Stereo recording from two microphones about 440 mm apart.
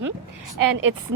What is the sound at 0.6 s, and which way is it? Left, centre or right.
Speech, right.